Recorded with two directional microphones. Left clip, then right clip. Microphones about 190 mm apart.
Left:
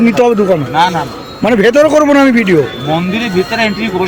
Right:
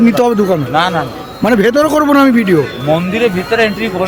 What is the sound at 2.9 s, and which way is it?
Speech, 30° right (ahead or behind).